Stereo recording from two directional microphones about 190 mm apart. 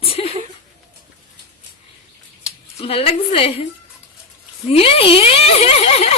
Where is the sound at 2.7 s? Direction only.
30° left (ahead or behind).